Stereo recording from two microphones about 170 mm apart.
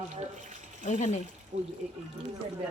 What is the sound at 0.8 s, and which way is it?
Speech, 40° left (ahead or behind).